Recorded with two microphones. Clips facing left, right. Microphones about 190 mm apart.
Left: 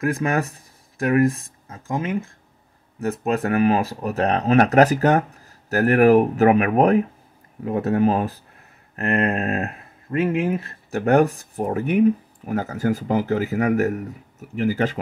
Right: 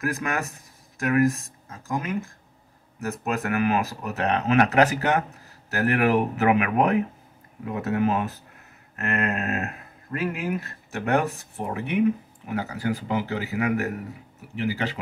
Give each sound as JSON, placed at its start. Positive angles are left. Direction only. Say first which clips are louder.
{"t": 0.0, "sound": "speech", "louder": "left 6 dB", "side_deg": 30}